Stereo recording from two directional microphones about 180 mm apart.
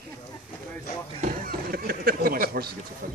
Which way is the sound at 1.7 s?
55° right (ahead or behind).